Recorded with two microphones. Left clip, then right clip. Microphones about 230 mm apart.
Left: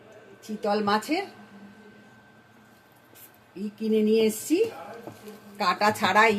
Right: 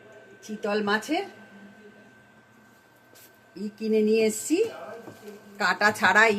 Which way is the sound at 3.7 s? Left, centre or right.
Centre.